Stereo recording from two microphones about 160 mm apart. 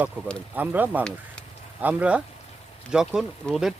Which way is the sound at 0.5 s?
10° right (ahead or behind).